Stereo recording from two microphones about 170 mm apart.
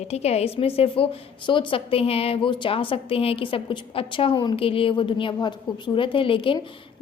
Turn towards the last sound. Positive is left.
turn(degrees=30)  # may be behind; listen again after turning